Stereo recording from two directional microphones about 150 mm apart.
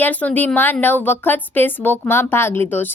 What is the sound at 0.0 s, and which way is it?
A woman's voice, 10° left (ahead or behind).